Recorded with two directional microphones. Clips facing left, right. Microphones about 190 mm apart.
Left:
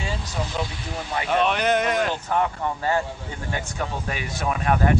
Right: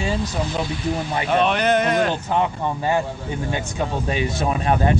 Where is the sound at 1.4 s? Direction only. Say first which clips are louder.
Right 2 dB; 5° left (ahead or behind).